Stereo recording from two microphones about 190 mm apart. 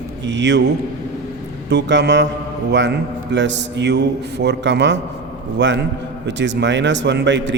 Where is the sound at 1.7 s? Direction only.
65° right (ahead or behind).